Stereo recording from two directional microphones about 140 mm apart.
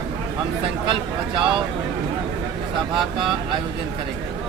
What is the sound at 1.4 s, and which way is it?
Speech, 40° right (ahead or behind).